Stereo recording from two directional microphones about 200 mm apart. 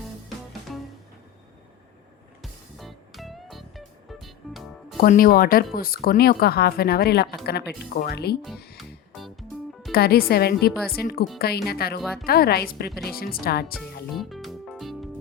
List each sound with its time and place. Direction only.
2.4 s music: centre (ahead or behind)
4.9 s speech: 45° left (ahead or behind)
8.8 s music: centre (ahead or behind)
9.9 s speech: 50° left (ahead or behind)
14.1 s music: centre (ahead or behind)